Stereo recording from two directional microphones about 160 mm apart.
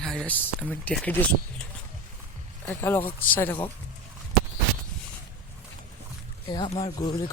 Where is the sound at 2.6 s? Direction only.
15° left (ahead or behind).